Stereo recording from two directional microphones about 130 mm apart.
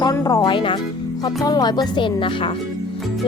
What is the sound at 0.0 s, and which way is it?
A child's voice, 25° left (ahead or behind).